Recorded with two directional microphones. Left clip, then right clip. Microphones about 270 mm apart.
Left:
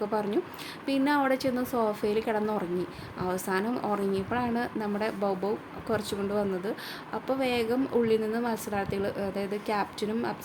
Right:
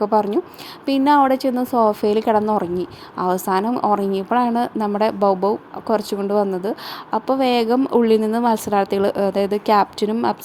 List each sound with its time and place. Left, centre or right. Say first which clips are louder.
0.0 s a woman's voice: right 11 dB; right